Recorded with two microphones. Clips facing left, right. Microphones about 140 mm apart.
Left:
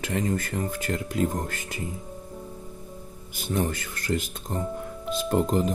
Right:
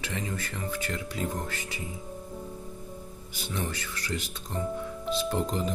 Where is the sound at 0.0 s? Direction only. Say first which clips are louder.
Left 7 dB; 45° left (ahead or behind).